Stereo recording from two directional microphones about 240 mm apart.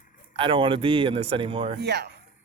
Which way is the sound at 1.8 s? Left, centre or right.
Right.